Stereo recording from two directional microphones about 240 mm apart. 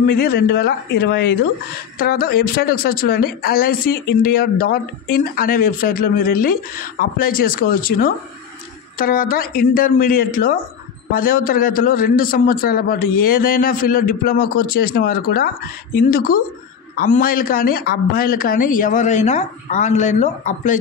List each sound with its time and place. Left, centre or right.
0.0 s a man's voice: left